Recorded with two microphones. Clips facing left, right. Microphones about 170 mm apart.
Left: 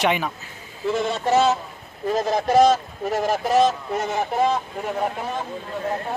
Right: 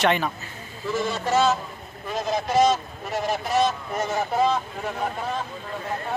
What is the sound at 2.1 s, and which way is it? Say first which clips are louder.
Speech: left 5 dB; 40° left (ahead or behind).